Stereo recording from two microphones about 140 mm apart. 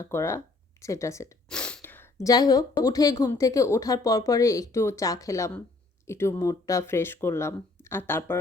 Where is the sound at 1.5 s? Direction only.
5° left (ahead or behind).